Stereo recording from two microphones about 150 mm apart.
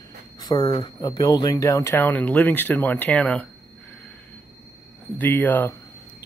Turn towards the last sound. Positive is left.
turn(degrees=10)  # may be behind; listen again after turning